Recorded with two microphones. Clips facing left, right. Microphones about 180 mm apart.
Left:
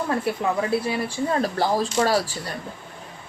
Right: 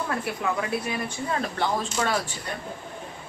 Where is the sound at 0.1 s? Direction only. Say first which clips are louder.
Left 4 dB; 30° left (ahead or behind).